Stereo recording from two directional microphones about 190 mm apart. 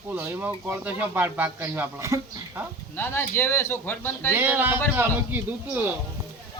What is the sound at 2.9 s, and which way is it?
A man's voice, 10° left (ahead or behind).